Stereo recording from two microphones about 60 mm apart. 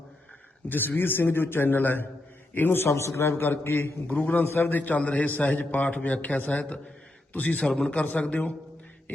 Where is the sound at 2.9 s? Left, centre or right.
Left.